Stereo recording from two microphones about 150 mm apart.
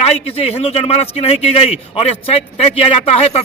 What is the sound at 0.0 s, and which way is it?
A man's voice, 45° left (ahead or behind).